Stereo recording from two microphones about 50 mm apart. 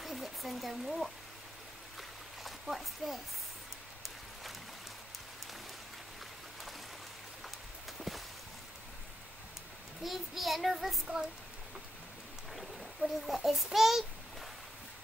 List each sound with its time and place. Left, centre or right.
0.0 s a sound: centre
2.0 s stream: centre
10.0 s child singing: centre
12.5 s a child's voice: centre